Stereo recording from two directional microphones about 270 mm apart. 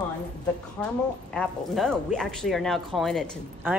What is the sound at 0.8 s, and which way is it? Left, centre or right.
Speech, centre.